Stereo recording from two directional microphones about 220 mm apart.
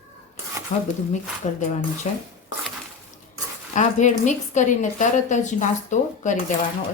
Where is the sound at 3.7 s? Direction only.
35° left (ahead or behind).